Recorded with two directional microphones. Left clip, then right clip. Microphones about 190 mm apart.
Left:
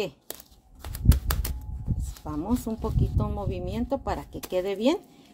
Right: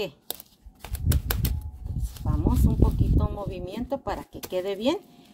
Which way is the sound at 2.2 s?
35° left (ahead or behind).